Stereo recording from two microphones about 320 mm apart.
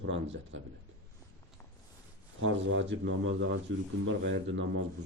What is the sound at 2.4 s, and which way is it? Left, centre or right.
Speech, right.